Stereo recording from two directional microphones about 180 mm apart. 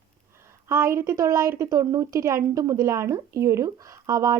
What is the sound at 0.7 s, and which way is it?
A woman's voice, 15° right (ahead or behind).